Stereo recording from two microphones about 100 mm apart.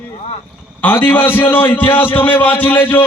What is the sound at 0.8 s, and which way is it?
A man's voice, 20° left (ahead or behind).